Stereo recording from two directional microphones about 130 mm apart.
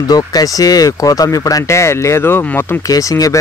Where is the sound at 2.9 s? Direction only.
25° left (ahead or behind).